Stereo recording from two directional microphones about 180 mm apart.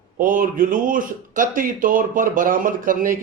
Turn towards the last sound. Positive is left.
turn(degrees=-50)  # may be behind; listen again after turning